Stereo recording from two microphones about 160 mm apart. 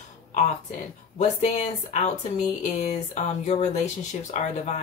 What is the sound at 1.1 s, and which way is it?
Speech, 45° left (ahead or behind).